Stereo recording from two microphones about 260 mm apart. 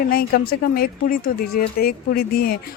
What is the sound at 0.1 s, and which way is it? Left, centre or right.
Speech, left.